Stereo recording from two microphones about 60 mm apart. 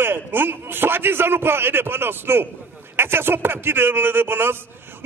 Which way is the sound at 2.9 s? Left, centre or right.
Right.